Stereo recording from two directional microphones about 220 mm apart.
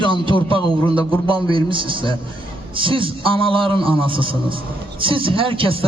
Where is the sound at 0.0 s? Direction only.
25° right (ahead or behind).